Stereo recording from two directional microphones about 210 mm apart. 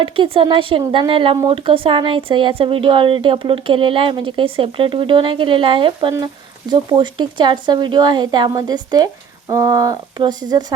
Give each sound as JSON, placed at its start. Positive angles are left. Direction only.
{"t": 0.0, "sound": "speech", "side_deg": -25}